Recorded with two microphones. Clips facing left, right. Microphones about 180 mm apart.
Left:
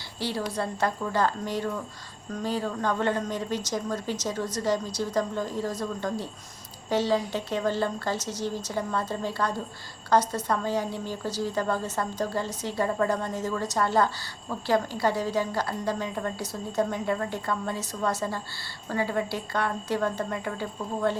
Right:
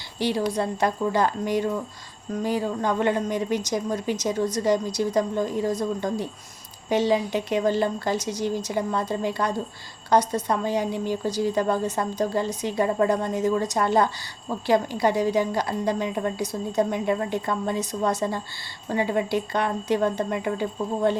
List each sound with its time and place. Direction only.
0.2 s a woman's voice: 15° right (ahead or behind)